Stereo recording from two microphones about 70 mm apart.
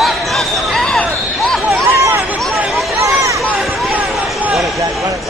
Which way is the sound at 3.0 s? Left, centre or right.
Right.